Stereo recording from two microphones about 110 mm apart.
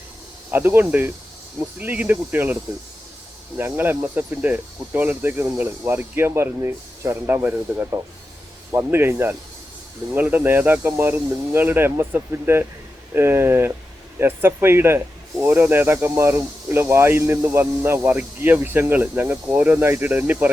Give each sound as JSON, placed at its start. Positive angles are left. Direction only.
{"t": 0.5, "sound": "speech", "side_deg": -20}
{"t": 3.6, "sound": "speech", "side_deg": -20}
{"t": 7.5, "sound": "speech", "side_deg": -10}
{"t": 8.7, "sound": "speech", "side_deg": -20}